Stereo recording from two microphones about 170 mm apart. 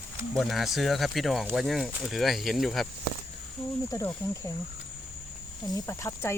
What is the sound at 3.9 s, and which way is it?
Speech, 15° left (ahead or behind).